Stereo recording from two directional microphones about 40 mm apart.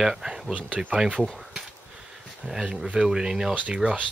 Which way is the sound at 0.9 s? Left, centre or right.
Right.